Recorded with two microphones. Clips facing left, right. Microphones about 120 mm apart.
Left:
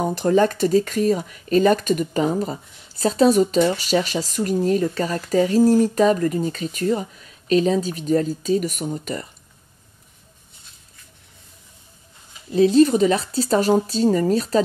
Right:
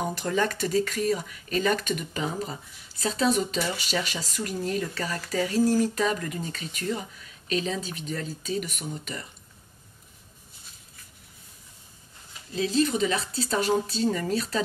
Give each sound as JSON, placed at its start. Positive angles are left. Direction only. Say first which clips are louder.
{"t": 0.0, "sound": "speech", "louder": "left 9 dB", "side_deg": 35}
{"t": 12.5, "sound": "speech", "louder": "left 10 dB", "side_deg": 40}